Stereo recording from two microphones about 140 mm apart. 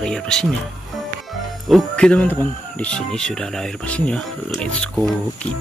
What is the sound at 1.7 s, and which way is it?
Speech, 5° left (ahead or behind).